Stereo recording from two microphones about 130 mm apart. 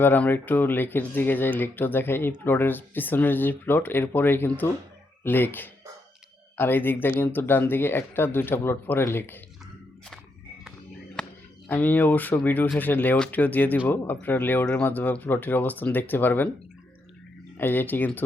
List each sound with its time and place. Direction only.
0.0 s speech: 15° left (ahead or behind)
11.2 s a sound: 5° left (ahead or behind)
11.7 s speech: 15° left (ahead or behind)
17.6 s speech: 15° left (ahead or behind)